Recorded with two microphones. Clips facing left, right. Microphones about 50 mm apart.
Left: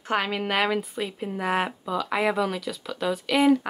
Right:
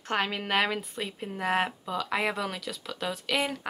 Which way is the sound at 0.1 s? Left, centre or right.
Centre.